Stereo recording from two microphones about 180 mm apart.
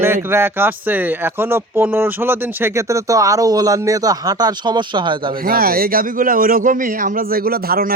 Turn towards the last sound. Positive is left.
turn(degrees=-55)  # may be behind; listen again after turning